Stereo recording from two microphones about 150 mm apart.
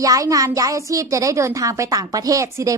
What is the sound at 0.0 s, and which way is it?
Speech, 20° right (ahead or behind).